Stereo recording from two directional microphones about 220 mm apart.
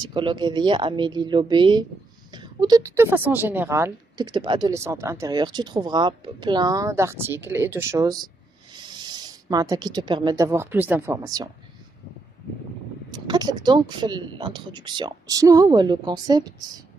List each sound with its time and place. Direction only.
0.0 s a woman's voice: 20° right (ahead or behind)
13.3 s speech: 20° right (ahead or behind)